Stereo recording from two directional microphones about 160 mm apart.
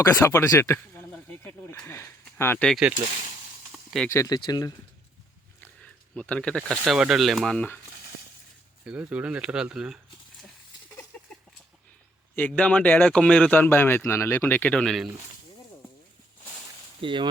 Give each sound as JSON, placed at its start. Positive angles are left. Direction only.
{"t": 0.0, "sound": "speech", "side_deg": 20}
{"t": 2.6, "sound": "speech", "side_deg": 0}
{"t": 3.7, "sound": "a sound", "side_deg": 0}
{"t": 4.1, "sound": "speech", "side_deg": 20}
{"t": 5.5, "sound": "speech", "side_deg": 10}
{"t": 8.8, "sound": "speech", "side_deg": -5}
{"t": 11.1, "sound": "a sound", "side_deg": 5}
{"t": 12.4, "sound": "speech", "side_deg": 10}
{"t": 17.0, "sound": "speech", "side_deg": -30}